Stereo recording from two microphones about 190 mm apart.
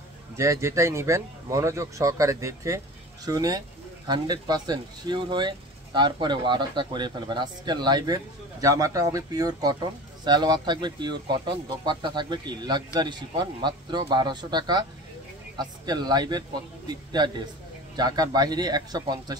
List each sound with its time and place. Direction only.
0.4 s speech: 15° right (ahead or behind)